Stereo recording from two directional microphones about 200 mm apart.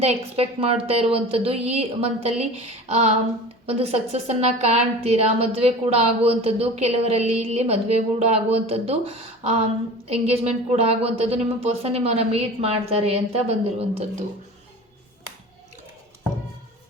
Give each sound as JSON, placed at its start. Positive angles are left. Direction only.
{"t": 0.0, "sound": "a woman's voice", "side_deg": -30}